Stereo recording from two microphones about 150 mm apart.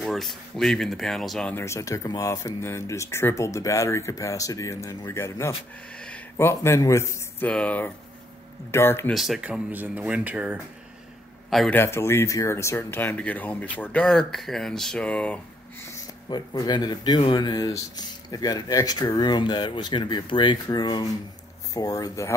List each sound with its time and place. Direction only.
0.0 s speech: centre (ahead or behind)
1.5 s speech: 20° left (ahead or behind)
9.1 s speech: centre (ahead or behind)
11.7 s speech: 15° left (ahead or behind)
16.3 s speech: 25° left (ahead or behind)